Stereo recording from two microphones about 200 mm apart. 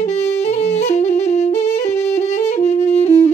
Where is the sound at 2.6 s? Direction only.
35° left (ahead or behind).